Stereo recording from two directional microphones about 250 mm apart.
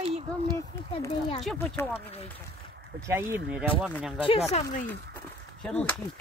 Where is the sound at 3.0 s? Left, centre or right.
Centre.